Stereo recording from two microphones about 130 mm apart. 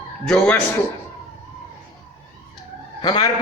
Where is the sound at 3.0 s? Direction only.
35° left (ahead or behind).